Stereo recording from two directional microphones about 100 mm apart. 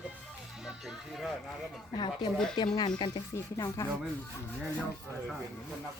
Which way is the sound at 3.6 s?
35° left (ahead or behind).